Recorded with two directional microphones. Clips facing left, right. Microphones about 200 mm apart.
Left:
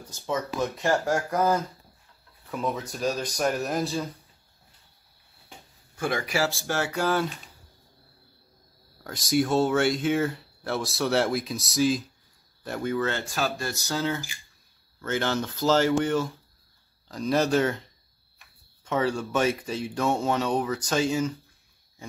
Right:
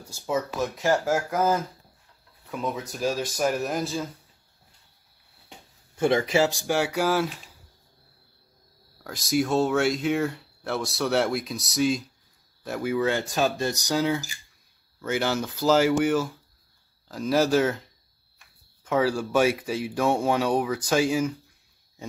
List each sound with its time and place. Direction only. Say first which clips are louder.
0.0 s speech: right 2 dB; 10° right (ahead or behind)
5.9 s speech: right 6 dB; 25° right (ahead or behind); by 7.2 s 10° right (ahead or behind)
9.0 s speech: even; centre (ahead or behind)
18.9 s speech: right 2 dB; 5° right (ahead or behind)